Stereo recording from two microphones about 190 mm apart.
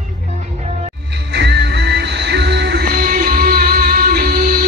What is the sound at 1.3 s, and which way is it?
Music, 65° right (ahead or behind).